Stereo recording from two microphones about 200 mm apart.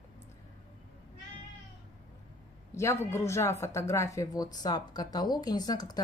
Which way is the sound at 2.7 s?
15° left (ahead or behind).